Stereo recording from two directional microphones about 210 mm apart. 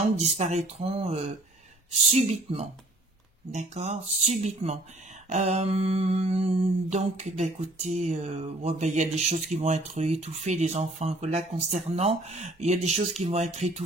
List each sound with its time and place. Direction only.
0.2 s mantra: 35° right (ahead or behind)